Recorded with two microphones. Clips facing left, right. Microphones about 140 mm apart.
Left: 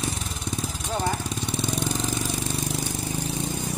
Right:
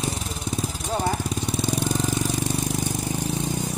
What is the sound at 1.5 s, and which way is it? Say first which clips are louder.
Jackhammer: right 2 dB; 10° right (ahead or behind).